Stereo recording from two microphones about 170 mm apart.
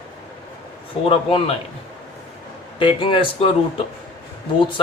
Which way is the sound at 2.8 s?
30° left (ahead or behind).